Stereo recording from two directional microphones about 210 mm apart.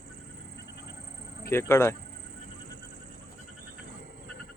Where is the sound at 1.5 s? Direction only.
10° left (ahead or behind).